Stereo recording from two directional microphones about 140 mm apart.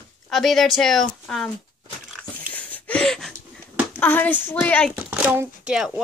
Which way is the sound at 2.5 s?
10° left (ahead or behind).